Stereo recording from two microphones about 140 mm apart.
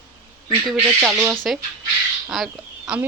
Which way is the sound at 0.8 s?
15° right (ahead or behind).